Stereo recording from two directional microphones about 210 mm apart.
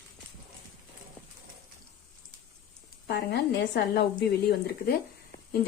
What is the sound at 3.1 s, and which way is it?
Speech, 50° left (ahead or behind).